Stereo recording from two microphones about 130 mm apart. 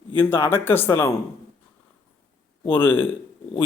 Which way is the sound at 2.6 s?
15° left (ahead or behind).